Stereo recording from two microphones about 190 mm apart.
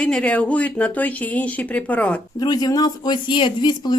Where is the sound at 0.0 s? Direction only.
5° left (ahead or behind).